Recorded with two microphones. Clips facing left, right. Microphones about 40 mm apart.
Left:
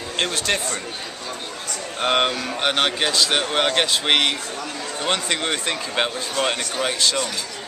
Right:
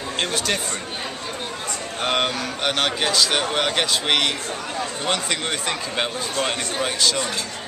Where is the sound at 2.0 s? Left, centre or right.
Centre.